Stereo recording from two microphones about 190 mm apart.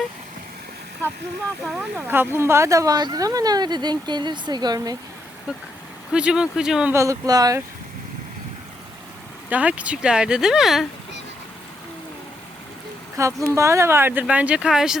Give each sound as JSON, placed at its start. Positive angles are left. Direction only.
{"t": 1.6, "sound": "speech", "side_deg": -5}
{"t": 6.1, "sound": "speech", "side_deg": -5}
{"t": 6.9, "sound": "speech", "side_deg": -15}
{"t": 9.5, "sound": "speech", "side_deg": -5}
{"t": 13.1, "sound": "speech", "side_deg": -15}